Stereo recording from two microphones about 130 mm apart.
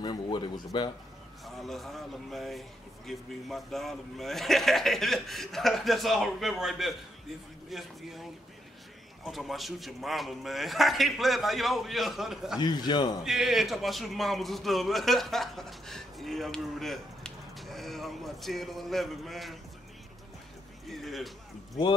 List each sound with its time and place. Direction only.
0.0 s speech: 35° left (ahead or behind)
1.4 s speech: centre (ahead or behind)
12.5 s a man's voice: 35° left (ahead or behind)
13.2 s speech: centre (ahead or behind)
20.9 s speech: centre (ahead or behind)